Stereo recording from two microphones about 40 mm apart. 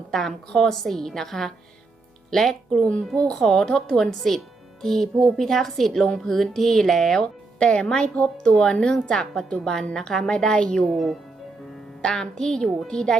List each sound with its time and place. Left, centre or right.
0.1 s a woman's voice: centre
7.6 s a woman's voice: left
10.9 s speech: centre
12.0 s a woman's voice: centre